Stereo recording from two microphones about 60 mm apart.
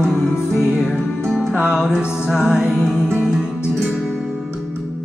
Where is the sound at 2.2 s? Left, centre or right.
Centre.